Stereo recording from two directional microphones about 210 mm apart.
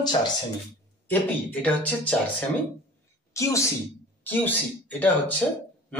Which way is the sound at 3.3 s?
15° left (ahead or behind).